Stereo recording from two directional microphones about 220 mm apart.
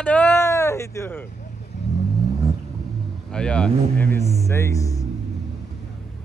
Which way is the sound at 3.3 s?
5° left (ahead or behind).